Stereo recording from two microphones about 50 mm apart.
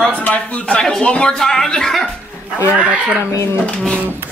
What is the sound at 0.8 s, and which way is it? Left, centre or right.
Speech, centre.